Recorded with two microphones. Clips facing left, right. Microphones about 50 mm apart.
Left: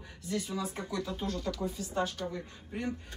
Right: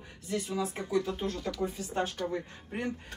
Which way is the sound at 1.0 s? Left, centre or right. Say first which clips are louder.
Right 1 dB; right.